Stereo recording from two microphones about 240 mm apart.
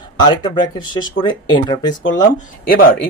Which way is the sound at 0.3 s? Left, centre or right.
Centre.